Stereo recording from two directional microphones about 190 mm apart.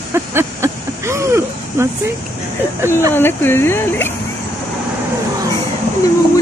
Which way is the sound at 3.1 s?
10° left (ahead or behind).